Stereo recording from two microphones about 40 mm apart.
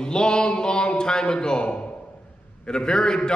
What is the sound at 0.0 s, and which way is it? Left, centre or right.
A man's voice, left.